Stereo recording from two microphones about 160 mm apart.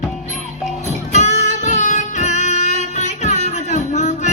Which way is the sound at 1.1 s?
45° left (ahead or behind).